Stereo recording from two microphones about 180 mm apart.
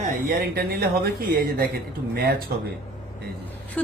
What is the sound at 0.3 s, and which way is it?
Speech, 60° right (ahead or behind).